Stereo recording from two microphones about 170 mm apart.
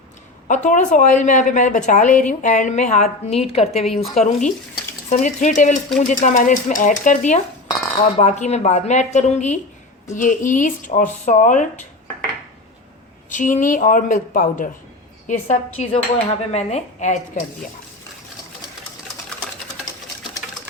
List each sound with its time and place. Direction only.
0.4 s a woman's voice: 45° left (ahead or behind)
13.3 s a woman's voice: 50° left (ahead or behind)